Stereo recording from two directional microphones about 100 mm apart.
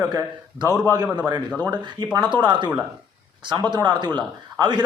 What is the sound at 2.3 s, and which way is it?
A man's voice, 50° right (ahead or behind).